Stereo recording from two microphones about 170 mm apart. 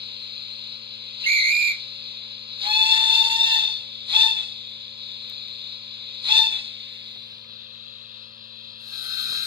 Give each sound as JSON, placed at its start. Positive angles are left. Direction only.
{"t": 0.0, "sound": "whistle", "side_deg": -30}
{"t": 5.0, "sound": "owl", "side_deg": -30}
{"t": 9.0, "sound": "a sound", "side_deg": -20}